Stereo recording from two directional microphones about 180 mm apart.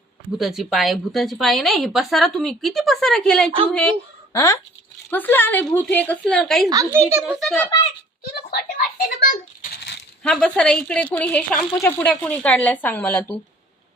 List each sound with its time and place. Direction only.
0.3 s speech: centre (ahead or behind)
4.3 s a woman's voice: 15° left (ahead or behind)
6.7 s a child's voice: 15° right (ahead or behind); by 7.7 s centre (ahead or behind)
8.4 s a sound: 55° left (ahead or behind)
10.2 s a woman's voice: 5° left (ahead or behind)